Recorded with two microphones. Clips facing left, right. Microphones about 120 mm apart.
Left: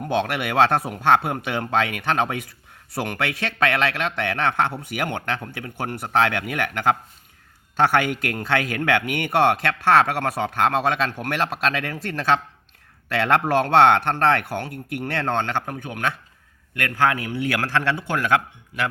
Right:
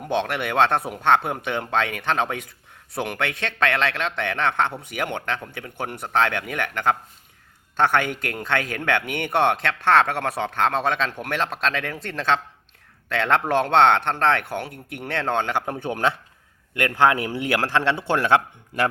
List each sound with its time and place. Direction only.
0.0 s speech: centre (ahead or behind)
15.6 s a man's voice: 30° right (ahead or behind)